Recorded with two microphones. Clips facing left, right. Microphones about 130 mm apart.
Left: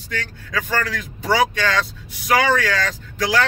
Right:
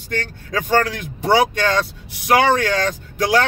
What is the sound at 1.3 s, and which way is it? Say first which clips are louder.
Speech: right 2 dB; 50° right (ahead or behind).